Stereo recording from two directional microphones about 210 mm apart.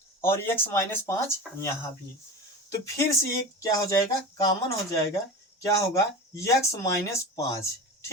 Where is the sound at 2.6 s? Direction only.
15° left (ahead or behind).